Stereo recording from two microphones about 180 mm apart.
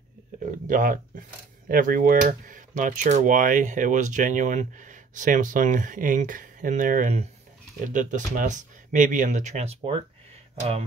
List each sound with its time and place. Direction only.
0.7 s speech: 45° right (ahead or behind)